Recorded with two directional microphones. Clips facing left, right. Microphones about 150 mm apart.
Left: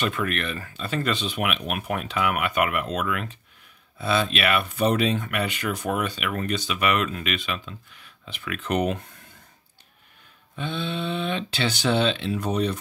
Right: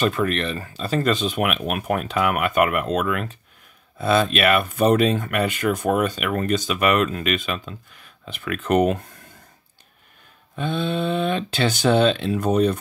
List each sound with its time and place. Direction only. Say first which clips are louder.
0.0 s speech: right 5 dB; 35° right (ahead or behind)
10.5 s speech: right 5 dB; 45° right (ahead or behind)